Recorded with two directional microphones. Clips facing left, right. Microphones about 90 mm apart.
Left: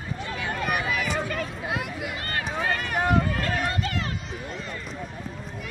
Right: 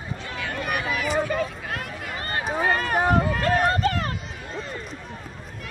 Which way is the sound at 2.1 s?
30° right (ahead or behind).